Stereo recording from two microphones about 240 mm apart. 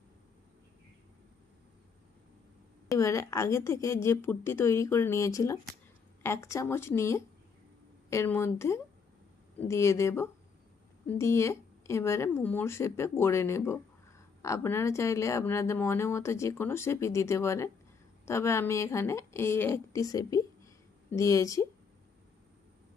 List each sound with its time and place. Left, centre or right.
2.9 s speech: centre